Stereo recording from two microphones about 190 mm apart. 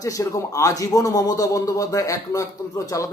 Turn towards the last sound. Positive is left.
turn(degrees=15)  # may be behind; listen again after turning